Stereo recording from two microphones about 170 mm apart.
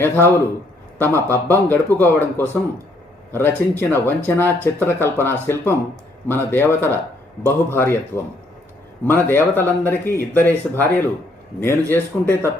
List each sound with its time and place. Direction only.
0.0 s speech: 15° left (ahead or behind)